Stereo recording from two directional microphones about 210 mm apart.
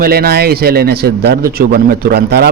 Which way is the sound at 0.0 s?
45° right (ahead or behind).